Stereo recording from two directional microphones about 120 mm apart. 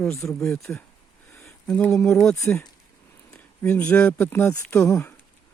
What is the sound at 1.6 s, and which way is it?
Speech, 10° left (ahead or behind).